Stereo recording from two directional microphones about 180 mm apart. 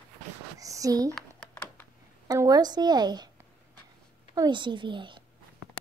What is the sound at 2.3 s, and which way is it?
A woman's voice, 20° right (ahead or behind).